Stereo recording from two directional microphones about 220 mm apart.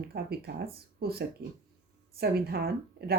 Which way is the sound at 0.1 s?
45° right (ahead or behind).